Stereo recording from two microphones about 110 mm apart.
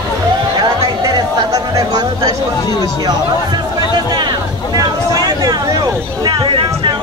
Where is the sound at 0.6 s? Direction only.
35° right (ahead or behind).